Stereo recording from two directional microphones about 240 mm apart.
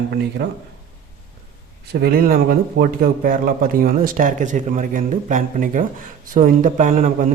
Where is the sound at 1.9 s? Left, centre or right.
Right.